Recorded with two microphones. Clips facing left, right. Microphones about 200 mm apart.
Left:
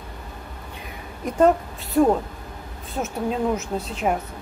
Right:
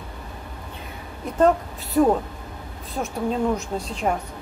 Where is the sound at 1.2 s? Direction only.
15° left (ahead or behind).